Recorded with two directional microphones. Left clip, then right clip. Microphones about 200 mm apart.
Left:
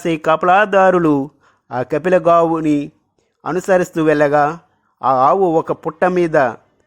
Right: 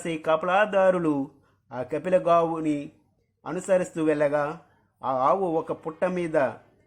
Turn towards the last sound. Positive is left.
turn(degrees=45)  # may be behind; listen again after turning